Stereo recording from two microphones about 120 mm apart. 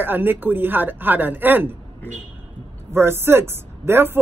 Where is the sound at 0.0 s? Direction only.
15° right (ahead or behind).